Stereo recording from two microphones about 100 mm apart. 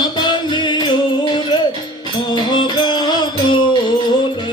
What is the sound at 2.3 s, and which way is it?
Music, 50° left (ahead or behind).